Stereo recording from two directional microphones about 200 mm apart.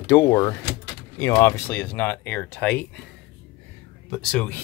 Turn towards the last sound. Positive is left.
turn(degrees=5)  # may be behind; listen again after turning